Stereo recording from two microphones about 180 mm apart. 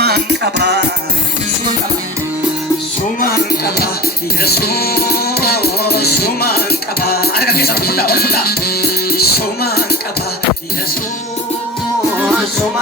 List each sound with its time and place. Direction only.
0.0 s music: 65° right (ahead or behind)
3.2 s music: 55° left (ahead or behind)